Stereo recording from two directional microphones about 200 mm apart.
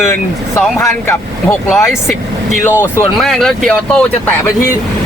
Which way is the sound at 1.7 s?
Centre (ahead or behind).